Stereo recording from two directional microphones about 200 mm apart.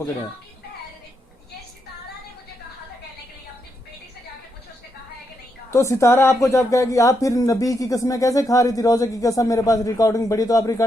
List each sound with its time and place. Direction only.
5.7 s speech: 15° left (ahead or behind)